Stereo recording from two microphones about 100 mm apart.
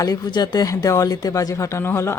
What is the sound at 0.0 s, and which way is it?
Speech, 40° left (ahead or behind).